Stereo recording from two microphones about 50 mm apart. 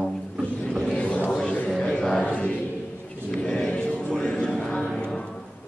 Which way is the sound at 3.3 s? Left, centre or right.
Centre.